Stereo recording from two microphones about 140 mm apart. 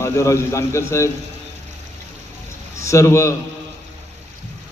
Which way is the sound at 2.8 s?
20° left (ahead or behind).